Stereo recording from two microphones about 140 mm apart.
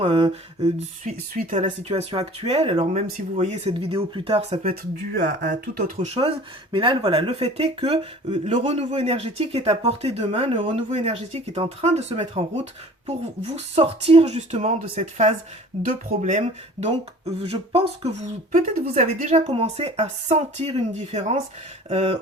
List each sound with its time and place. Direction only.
0.0 s speech: 45° right (ahead or behind)
1.0 s speech: 75° right (ahead or behind); by 6.1 s 60° right (ahead or behind)
6.1 s speech: 40° right (ahead or behind)
13.7 s speech: 45° right (ahead or behind)
15.8 s speech: 70° right (ahead or behind)
16.4 s speech: 45° right (ahead or behind)